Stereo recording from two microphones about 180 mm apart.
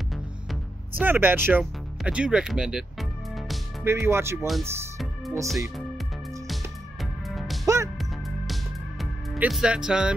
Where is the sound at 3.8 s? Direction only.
15° right (ahead or behind).